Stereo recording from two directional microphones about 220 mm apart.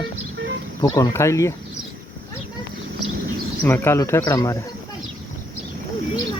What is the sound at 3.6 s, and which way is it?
Speech, 10° left (ahead or behind).